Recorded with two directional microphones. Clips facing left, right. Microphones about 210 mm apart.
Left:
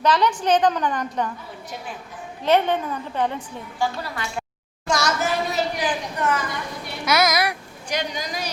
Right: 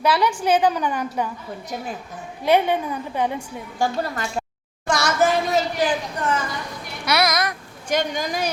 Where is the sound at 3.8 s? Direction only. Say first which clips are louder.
Right 3 dB; 45° right (ahead or behind).